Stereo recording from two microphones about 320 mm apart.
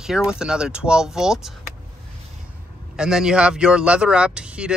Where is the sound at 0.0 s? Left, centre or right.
Centre.